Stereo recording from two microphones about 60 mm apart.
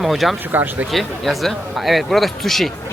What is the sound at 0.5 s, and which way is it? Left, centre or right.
Speech, right.